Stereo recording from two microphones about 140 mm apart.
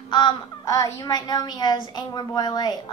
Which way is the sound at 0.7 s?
25° left (ahead or behind).